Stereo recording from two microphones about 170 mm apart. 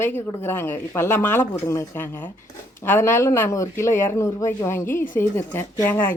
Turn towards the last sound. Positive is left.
turn(degrees=10)  # may be behind; listen again after turning